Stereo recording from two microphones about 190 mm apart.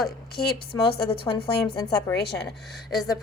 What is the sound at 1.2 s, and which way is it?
Speech, 25° left (ahead or behind).